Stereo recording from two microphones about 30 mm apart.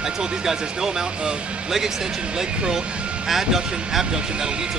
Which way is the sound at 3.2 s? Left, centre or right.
Centre.